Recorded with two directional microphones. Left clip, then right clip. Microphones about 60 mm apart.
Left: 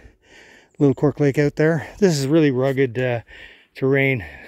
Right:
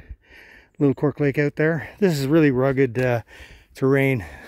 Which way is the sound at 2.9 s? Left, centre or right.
Right.